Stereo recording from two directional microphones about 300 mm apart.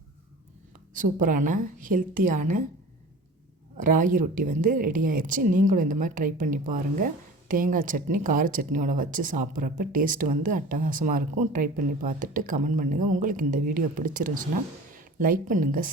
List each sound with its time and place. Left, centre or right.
0.9 s speech: right
3.8 s speech: right